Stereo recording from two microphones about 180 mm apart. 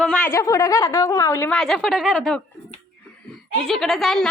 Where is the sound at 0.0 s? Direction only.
5° left (ahead or behind).